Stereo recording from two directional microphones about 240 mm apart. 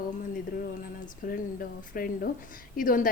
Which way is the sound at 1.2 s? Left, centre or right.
Left.